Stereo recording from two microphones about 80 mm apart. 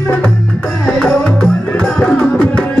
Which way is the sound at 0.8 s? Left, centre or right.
Centre.